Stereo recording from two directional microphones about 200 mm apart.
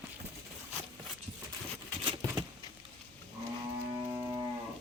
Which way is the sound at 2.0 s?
20° right (ahead or behind).